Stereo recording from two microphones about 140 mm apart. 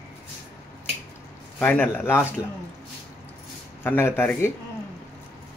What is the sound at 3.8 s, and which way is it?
Speech, 15° left (ahead or behind).